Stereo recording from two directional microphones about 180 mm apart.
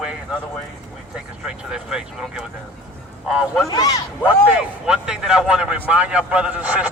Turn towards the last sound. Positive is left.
turn(degrees=-5)  # may be behind; listen again after turning